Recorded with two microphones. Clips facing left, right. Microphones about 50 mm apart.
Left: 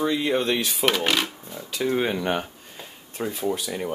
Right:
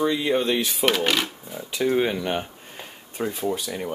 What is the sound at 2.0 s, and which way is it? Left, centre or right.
Speech, centre.